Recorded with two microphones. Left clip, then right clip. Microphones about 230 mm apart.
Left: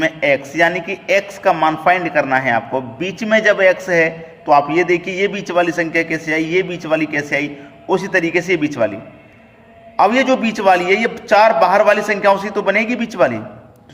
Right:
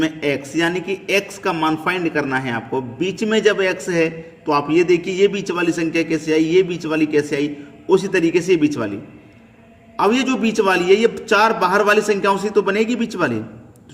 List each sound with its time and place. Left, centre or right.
0.0 s a man's voice: centre
10.0 s a man's voice: centre